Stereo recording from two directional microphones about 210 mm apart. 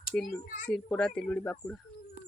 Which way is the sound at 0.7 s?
5° left (ahead or behind).